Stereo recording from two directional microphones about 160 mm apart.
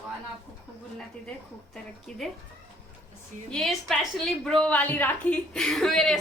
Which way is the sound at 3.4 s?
5° left (ahead or behind).